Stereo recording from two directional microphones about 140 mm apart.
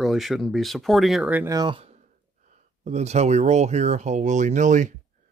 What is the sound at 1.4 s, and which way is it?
Speech, 25° right (ahead or behind).